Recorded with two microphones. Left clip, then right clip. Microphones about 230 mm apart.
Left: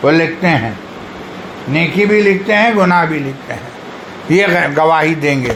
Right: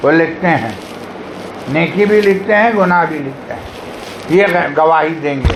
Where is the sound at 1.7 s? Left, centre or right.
Left.